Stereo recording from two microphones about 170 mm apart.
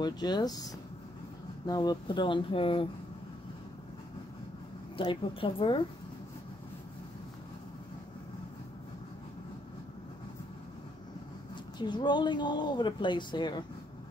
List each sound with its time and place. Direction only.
0.0 s speech: 25° left (ahead or behind)
4.9 s speech: 30° left (ahead or behind)
11.8 s speech: 25° left (ahead or behind)